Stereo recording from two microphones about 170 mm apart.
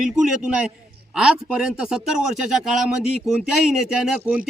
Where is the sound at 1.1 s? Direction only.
5° right (ahead or behind).